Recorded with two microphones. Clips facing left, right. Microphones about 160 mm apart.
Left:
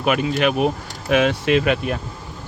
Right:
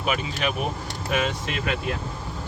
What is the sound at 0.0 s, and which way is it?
Speech, 65° left (ahead or behind).